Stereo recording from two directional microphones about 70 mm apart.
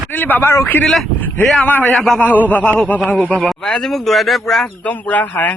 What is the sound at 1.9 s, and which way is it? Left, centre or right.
Speech, centre.